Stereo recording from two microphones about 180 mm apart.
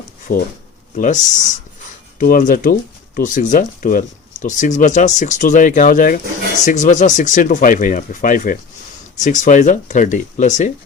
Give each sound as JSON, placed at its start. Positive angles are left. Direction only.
{"t": 0.3, "sound": "speech", "side_deg": 50}